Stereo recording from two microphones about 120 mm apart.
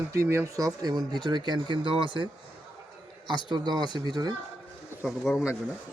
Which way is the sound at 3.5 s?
40° right (ahead or behind).